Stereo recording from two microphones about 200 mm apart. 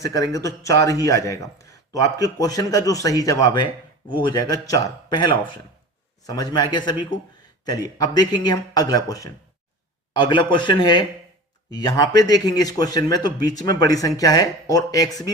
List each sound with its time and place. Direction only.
0.0 s a man's voice: 15° left (ahead or behind)